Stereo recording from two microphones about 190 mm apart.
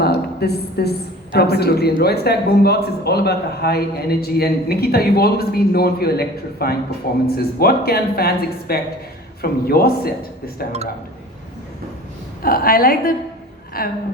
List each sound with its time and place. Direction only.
0.0 s a woman's voice: 55° left (ahead or behind)
12.4 s speech: 50° left (ahead or behind)